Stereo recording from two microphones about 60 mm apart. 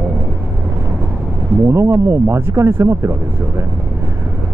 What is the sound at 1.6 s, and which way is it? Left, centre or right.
Speech, right.